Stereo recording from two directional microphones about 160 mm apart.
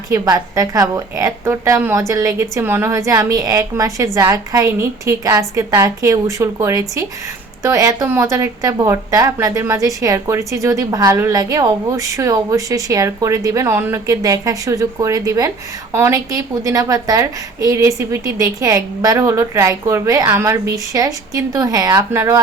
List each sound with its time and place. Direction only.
0.1 s speech: 20° right (ahead or behind)